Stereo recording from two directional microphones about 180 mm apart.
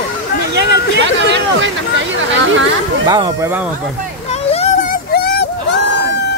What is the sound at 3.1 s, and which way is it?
Speech, 20° right (ahead or behind).